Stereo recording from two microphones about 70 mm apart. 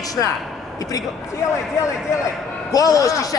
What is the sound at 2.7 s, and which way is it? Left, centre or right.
Speech, left.